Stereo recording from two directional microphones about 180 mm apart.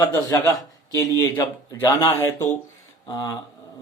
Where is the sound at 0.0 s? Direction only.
20° left (ahead or behind).